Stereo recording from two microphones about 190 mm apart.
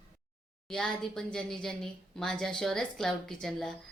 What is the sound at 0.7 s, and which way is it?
A woman's voice, 5° left (ahead or behind).